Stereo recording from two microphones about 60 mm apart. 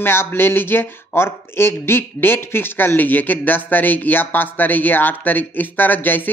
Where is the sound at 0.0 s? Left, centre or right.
Left.